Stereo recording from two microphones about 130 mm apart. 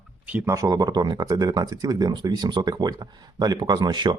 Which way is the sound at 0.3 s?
10° right (ahead or behind).